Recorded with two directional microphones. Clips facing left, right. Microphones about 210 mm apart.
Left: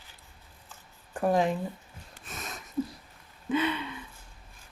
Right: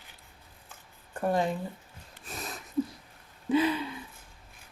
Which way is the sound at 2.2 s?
35° right (ahead or behind).